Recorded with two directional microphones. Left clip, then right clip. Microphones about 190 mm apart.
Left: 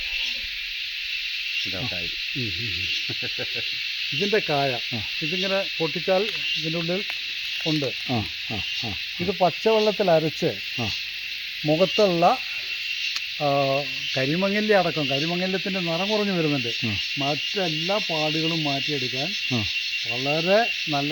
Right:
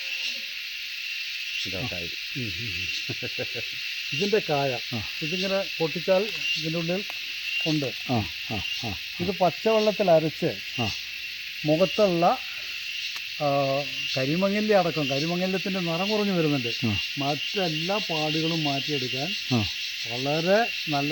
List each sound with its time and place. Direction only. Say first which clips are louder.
4.2 s a sound: left 2 dB; 25° left (ahead or behind)
5.4 s speech: left 1 dB; 15° left (ahead or behind)
7.6 s insect: left 2 dB; 15° left (ahead or behind)
9.2 s a sound: left 2 dB; 20° left (ahead or behind)
11.6 s speech: left 2 dB; 30° left (ahead or behind)
13.4 s speech: left 2 dB; 25° left (ahead or behind); by 18.9 s 5° left (ahead or behind)
20.2 s speech: left 2 dB; centre (ahead or behind)